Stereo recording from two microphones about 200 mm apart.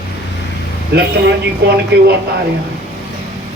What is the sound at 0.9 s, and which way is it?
Speech, 55° right (ahead or behind).